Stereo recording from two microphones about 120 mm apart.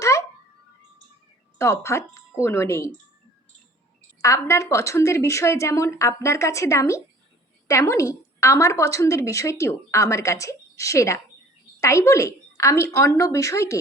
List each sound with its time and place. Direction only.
0.0 s a sound: 25° left (ahead or behind)
1.5 s a woman's voice: 25° left (ahead or behind)
4.2 s a woman's voice: 25° left (ahead or behind)